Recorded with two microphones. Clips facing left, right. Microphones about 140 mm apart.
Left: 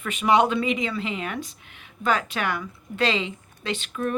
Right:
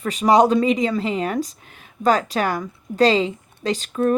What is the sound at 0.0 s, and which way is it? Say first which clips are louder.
Speech: right 5 dB; 35° right (ahead or behind).